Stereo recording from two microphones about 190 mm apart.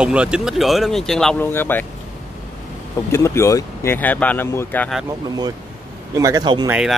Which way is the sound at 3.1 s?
15° left (ahead or behind).